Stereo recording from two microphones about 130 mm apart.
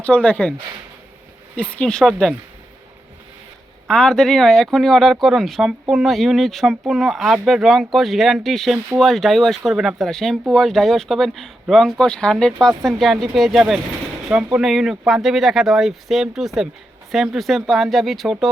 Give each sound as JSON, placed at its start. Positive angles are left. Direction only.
{"t": 0.0, "sound": "speech", "side_deg": 10}
{"t": 1.5, "sound": "speech", "side_deg": 5}
{"t": 3.8, "sound": "speech", "side_deg": 5}